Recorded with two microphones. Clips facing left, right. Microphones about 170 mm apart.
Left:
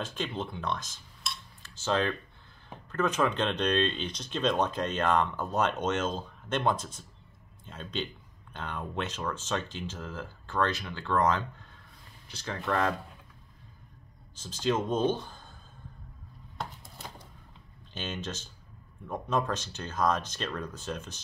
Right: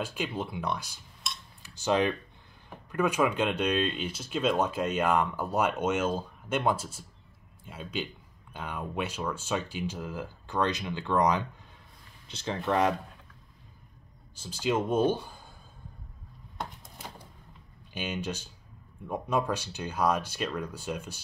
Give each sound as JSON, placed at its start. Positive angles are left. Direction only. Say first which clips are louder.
{"t": 0.0, "sound": "speech", "louder": "right 1 dB", "side_deg": -10}
{"t": 14.3, "sound": "speech", "louder": "even", "side_deg": -10}
{"t": 17.9, "sound": "speech", "louder": "right 3 dB", "side_deg": -10}